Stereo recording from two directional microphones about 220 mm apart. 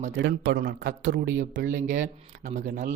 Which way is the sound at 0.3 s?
45° right (ahead or behind).